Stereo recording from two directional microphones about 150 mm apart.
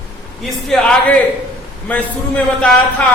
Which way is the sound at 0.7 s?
5° left (ahead or behind).